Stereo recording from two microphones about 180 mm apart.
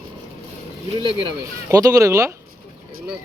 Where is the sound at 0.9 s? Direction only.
30° right (ahead or behind).